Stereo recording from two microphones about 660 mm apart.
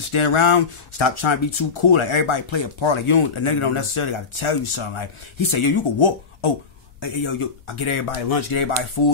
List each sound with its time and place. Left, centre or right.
0.1 s speech: left